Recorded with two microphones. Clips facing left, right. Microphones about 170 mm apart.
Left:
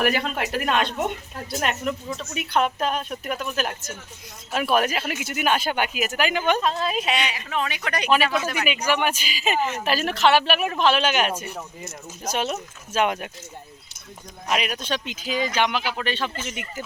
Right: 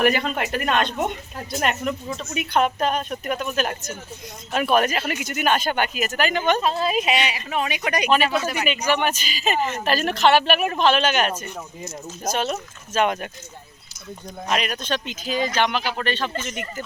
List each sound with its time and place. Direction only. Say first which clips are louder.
0.0 s speech: right 3 dB; 5° left (ahead or behind)
6.6 s a woman's voice: right 2 dB; 5° right (ahead or behind)
8.6 s speech: right 1 dB; 5° left (ahead or behind)
14.4 s speech: right 1 dB; 5° left (ahead or behind)
15.2 s speech: right 1 dB; 45° right (ahead or behind)
15.5 s speech: right 1 dB; 10° left (ahead or behind)